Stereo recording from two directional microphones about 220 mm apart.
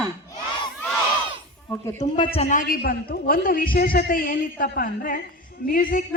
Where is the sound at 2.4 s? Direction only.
35° left (ahead or behind).